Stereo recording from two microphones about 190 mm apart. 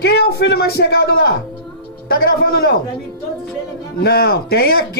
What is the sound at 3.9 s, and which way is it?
Speech, 55° left (ahead or behind).